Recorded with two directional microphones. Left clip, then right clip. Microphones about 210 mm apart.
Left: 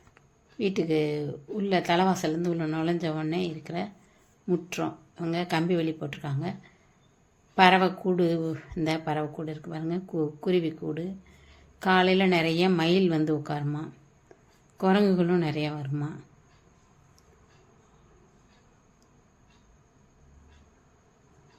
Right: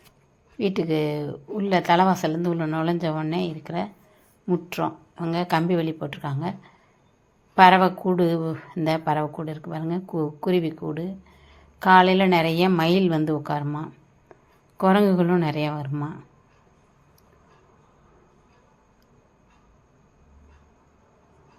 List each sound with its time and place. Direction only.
0.6 s speech: 5° right (ahead or behind)